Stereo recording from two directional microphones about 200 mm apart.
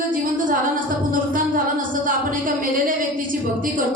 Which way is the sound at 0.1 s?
45° right (ahead or behind).